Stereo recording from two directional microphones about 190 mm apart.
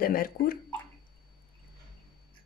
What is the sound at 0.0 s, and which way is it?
Speech, 50° left (ahead or behind).